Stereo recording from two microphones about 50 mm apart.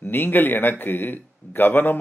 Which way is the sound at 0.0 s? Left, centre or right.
Left.